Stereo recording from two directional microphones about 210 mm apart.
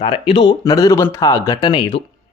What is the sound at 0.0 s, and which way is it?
Speech, 25° left (ahead or behind).